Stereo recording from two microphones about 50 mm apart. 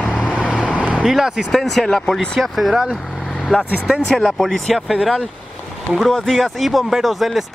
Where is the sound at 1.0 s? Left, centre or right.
Centre.